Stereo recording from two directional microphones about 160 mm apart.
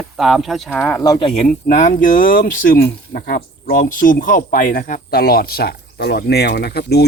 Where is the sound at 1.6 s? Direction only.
55° left (ahead or behind); by 7.0 s 90° left.